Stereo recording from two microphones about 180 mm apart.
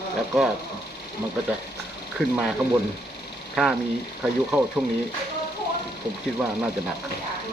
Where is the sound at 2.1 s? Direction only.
Centre (ahead or behind).